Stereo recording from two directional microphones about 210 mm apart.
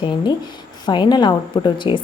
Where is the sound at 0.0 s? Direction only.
20° left (ahead or behind).